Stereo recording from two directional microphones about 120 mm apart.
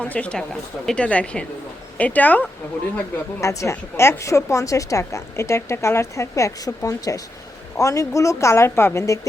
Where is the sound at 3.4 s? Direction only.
25° left (ahead or behind).